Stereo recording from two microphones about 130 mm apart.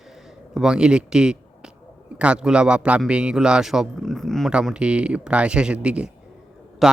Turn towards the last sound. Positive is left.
turn(degrees=0)  # may be behind; listen again after turning